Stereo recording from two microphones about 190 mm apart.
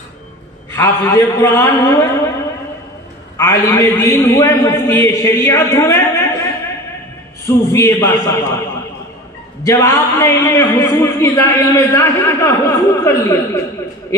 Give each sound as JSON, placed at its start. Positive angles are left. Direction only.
{"t": 0.7, "sound": "a man's voice", "side_deg": 15}
{"t": 3.3, "sound": "a man's voice", "side_deg": 15}
{"t": 7.7, "sound": "a man's voice", "side_deg": 15}
{"t": 9.7, "sound": "a man's voice", "side_deg": 15}